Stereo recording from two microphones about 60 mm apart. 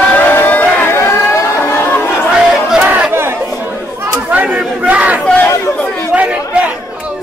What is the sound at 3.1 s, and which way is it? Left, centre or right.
Chatter, right.